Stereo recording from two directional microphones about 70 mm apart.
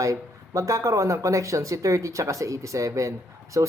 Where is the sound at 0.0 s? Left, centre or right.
Right.